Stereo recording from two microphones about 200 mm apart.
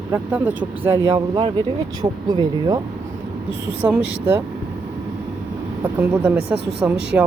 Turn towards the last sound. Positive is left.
turn(degrees=-10)  # may be behind; listen again after turning